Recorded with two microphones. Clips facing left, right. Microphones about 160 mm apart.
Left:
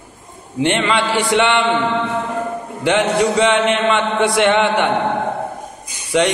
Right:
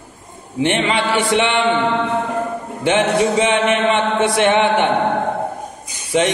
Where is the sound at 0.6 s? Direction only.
20° right (ahead or behind).